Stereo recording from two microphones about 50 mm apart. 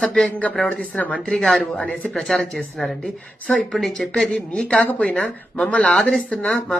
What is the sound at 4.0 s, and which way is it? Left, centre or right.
Speech, centre.